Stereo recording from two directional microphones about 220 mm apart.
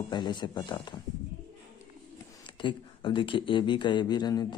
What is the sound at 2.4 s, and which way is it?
Speech, 20° left (ahead or behind).